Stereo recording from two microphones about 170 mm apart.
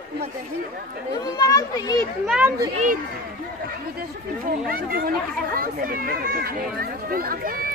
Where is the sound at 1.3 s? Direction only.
20° left (ahead or behind).